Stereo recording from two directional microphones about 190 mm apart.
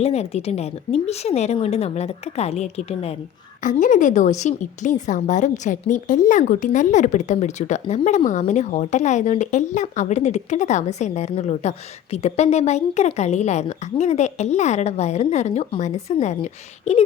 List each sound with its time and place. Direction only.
0.0 s a woman's voice: 35° left (ahead or behind)